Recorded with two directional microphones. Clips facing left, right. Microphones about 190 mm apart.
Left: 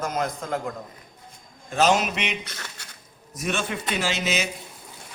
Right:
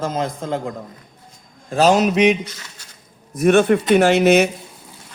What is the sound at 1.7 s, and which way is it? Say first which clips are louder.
Speech: right 7 dB; 35° right (ahead or behind).